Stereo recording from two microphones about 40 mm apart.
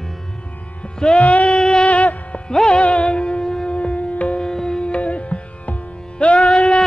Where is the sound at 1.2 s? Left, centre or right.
Left.